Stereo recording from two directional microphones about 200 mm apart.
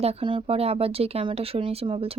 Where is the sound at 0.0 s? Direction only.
30° right (ahead or behind).